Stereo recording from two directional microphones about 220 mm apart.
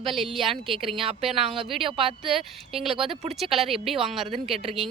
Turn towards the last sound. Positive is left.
turn(degrees=-25)  # may be behind; listen again after turning